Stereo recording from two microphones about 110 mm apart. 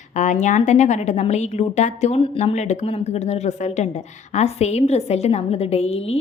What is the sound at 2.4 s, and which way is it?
Speech, 90° left.